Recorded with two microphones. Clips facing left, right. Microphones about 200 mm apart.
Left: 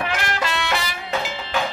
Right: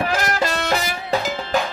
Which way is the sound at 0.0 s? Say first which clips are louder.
Right 4 dB; 40° right (ahead or behind).